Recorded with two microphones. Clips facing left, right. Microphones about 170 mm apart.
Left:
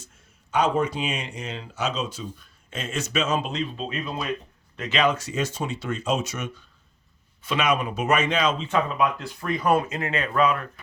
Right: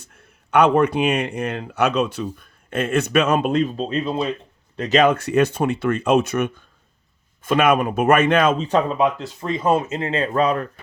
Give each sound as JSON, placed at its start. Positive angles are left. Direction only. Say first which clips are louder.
{"t": 0.0, "sound": "speech", "louder": "right 2 dB", "side_deg": -60}
{"t": 4.8, "sound": "a man's voice", "louder": "right 7 dB", "side_deg": -45}
{"t": 8.6, "sound": "speech", "louder": "right 5 dB", "side_deg": -35}